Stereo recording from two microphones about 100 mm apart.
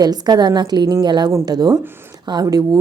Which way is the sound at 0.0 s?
45° right (ahead or behind).